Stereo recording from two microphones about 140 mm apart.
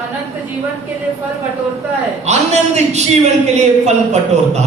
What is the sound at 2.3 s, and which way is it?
A man's voice, 50° right (ahead or behind).